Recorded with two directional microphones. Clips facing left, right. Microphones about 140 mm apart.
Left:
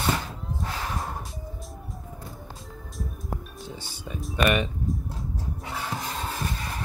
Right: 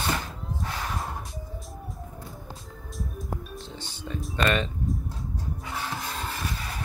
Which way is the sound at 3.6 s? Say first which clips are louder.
Left 1 dB; 10° left (ahead or behind).